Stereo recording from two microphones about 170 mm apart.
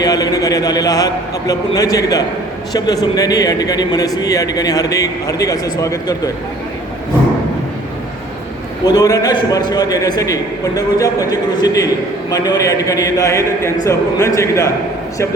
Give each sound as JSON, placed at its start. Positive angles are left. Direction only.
{"t": 0.0, "sound": "a man's voice", "side_deg": 20}
{"t": 8.8, "sound": "speech", "side_deg": 20}